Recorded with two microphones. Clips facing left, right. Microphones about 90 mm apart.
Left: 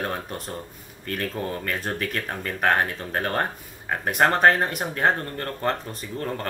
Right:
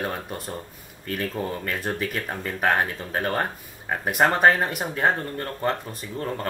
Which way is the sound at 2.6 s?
5° right (ahead or behind).